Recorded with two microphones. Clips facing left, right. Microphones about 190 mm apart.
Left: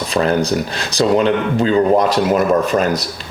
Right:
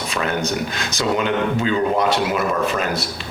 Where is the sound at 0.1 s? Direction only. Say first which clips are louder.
Left 7 dB; 35° left (ahead or behind).